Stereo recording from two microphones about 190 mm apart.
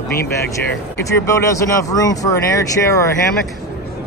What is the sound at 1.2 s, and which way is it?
Speech, 15° left (ahead or behind).